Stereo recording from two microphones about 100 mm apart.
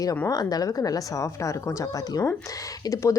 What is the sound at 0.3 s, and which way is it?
Speech, 40° left (ahead or behind).